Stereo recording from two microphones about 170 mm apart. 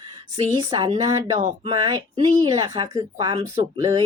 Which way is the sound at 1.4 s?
40° right (ahead or behind).